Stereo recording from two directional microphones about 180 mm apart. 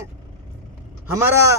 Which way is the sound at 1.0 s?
15° right (ahead or behind).